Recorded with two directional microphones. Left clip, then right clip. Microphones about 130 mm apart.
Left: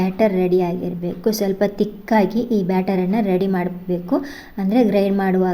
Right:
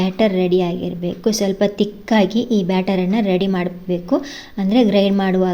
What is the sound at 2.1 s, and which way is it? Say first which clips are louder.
A woman's voice: right 1 dB; 40° right (ahead or behind).